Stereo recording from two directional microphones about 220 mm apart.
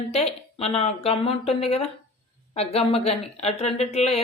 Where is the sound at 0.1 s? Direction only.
30° left (ahead or behind).